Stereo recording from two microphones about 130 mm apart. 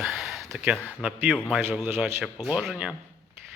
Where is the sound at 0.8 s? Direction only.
10° right (ahead or behind).